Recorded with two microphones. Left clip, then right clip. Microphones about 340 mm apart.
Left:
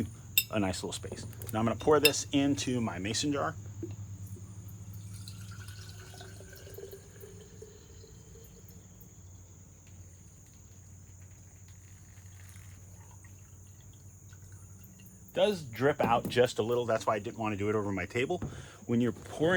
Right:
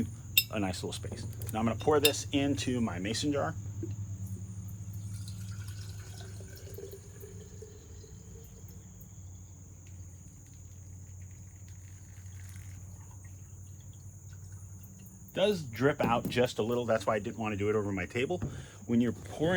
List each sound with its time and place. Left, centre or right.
0.5 s speech: left
15.3 s speech: left